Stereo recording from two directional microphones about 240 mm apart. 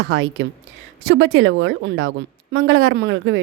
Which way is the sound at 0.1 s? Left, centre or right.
Right.